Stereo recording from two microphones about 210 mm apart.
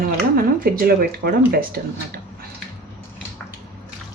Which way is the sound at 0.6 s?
45° right (ahead or behind).